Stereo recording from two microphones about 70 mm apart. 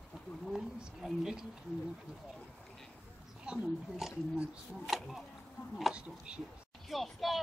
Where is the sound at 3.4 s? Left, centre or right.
Centre.